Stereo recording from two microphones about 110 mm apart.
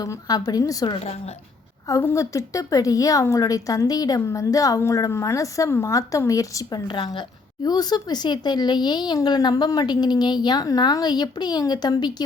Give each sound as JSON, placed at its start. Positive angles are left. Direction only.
{"t": 0.0, "sound": "a woman's voice", "side_deg": 35}